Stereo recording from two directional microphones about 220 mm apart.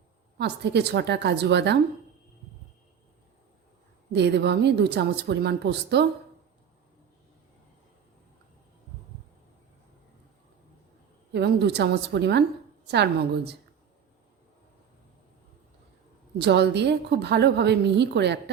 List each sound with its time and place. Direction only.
0.3 s a woman's voice: 50° right (ahead or behind)
4.1 s a woman's voice: 50° right (ahead or behind)
11.3 s a woman's voice: 50° right (ahead or behind)
16.4 s a woman's voice: 50° right (ahead or behind)